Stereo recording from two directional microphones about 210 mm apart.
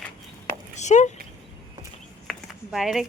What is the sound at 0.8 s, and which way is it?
Speech, 35° left (ahead or behind).